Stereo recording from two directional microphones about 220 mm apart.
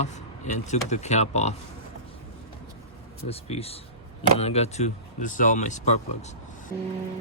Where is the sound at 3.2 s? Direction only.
25° left (ahead or behind).